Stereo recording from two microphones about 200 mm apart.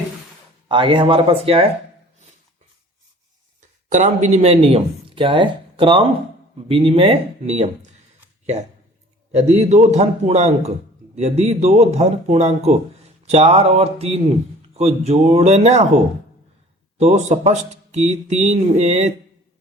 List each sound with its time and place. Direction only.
0.7 s speech: 25° right (ahead or behind)
3.8 s speech: 35° right (ahead or behind)
9.3 s speech: 30° right (ahead or behind)
17.0 s speech: 30° right (ahead or behind)